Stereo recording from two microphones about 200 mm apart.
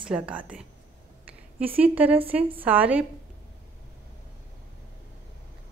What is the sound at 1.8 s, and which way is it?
Speech, 10° right (ahead or behind).